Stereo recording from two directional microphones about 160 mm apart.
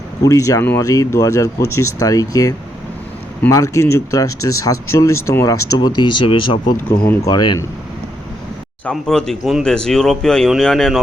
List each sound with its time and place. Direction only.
0.2 s speech: 20° left (ahead or behind)
7.0 s speech: 10° left (ahead or behind)
7.3 s speech: 25° left (ahead or behind)
8.8 s speech: 5° left (ahead or behind)